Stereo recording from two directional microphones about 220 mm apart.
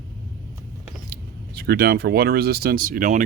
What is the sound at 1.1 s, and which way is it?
Speech, 45° right (ahead or behind).